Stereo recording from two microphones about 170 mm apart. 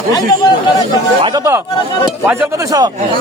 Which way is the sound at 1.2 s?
20° right (ahead or behind).